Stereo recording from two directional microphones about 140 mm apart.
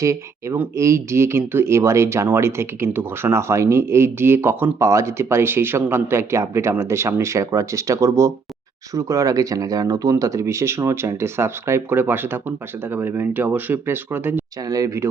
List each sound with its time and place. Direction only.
0.0 s speech: 20° right (ahead or behind)
14.7 s speech: 25° right (ahead or behind)